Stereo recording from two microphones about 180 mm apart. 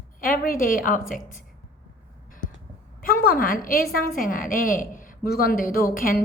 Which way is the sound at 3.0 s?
55° left (ahead or behind).